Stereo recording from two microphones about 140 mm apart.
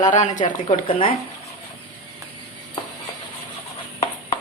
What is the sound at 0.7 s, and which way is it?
Speech, 40° left (ahead or behind).